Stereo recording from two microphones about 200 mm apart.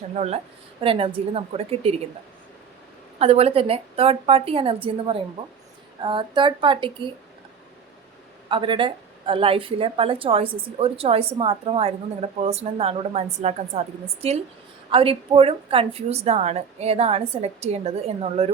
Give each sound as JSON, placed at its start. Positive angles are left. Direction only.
{"t": 0.8, "sound": "a woman's voice", "side_deg": -25}
{"t": 3.2, "sound": "a woman's voice", "side_deg": -30}
{"t": 8.4, "sound": "a woman's voice", "side_deg": -25}